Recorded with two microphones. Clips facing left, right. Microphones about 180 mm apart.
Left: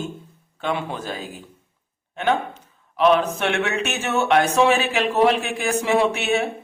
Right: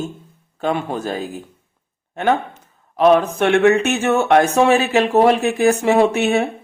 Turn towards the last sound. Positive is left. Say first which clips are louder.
# right 5 dB
turn(degrees=-45)  # may be behind; listen again after turning